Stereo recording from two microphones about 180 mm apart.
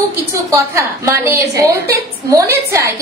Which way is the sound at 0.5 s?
15° right (ahead or behind).